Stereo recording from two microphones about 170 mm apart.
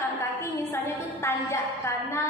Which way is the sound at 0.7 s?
15° left (ahead or behind).